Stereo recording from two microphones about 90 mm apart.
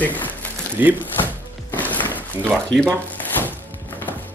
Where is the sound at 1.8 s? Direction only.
20° left (ahead or behind).